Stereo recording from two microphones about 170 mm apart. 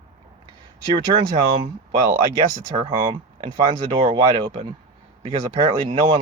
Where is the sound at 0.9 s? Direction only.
30° right (ahead or behind).